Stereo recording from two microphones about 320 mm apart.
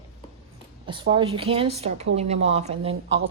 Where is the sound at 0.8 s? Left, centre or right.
Centre.